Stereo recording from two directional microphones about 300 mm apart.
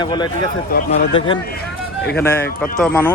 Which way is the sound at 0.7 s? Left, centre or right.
Left.